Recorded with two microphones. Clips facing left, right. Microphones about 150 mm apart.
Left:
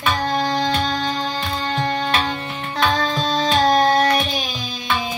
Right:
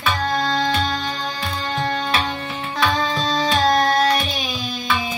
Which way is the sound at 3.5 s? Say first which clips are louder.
Left 2 dB; 25° left (ahead or behind).